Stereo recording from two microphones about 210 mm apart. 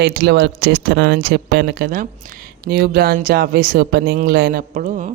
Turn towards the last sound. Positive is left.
turn(degrees=-35)  # may be behind; listen again after turning